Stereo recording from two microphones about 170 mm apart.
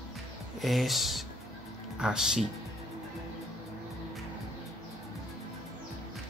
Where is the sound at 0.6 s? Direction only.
Centre (ahead or behind).